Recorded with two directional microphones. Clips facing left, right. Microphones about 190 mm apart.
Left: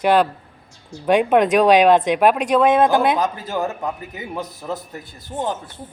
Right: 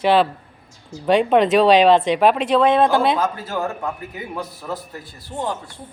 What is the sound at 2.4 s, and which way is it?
Speech, centre (ahead or behind).